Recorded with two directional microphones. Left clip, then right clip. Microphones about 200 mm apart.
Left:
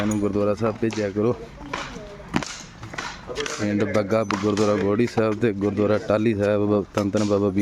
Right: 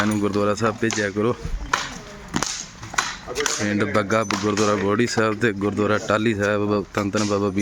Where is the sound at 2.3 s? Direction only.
25° left (ahead or behind).